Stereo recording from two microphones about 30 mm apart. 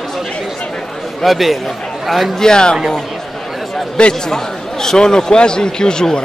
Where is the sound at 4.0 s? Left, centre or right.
Left.